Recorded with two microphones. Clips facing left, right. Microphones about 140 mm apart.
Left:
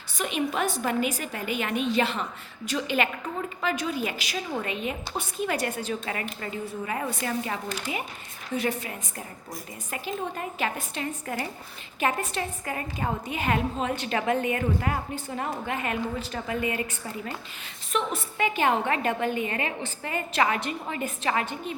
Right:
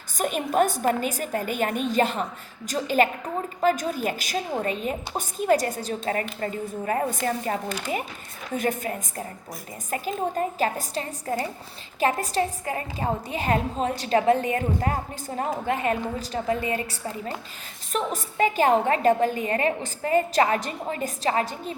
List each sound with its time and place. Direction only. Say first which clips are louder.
0.2 s a woman's voice: right 5 dB; 45° right (ahead or behind)